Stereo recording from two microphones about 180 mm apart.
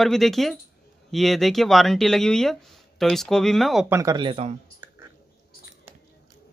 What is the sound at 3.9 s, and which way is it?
Speech, 20° right (ahead or behind).